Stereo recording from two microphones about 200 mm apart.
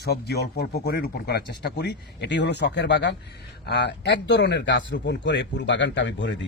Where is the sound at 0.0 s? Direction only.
55° left (ahead or behind).